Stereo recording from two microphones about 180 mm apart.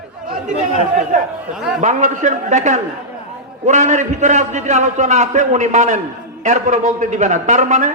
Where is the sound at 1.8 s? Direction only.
40° right (ahead or behind).